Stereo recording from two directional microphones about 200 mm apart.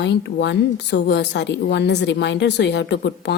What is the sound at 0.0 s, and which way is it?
A woman's voice, 60° left (ahead or behind).